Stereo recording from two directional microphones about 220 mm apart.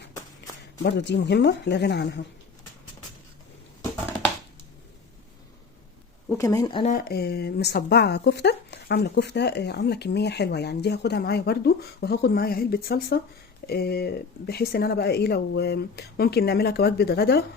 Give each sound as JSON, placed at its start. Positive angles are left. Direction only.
{"t": 0.8, "sound": "speech", "side_deg": 50}
{"t": 6.3, "sound": "speech", "side_deg": 15}
{"t": 6.8, "sound": "speech", "side_deg": 40}